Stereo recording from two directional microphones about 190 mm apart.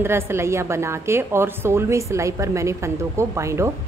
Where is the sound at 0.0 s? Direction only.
15° right (ahead or behind).